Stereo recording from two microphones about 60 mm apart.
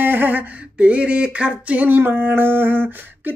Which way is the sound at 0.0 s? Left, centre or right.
Right.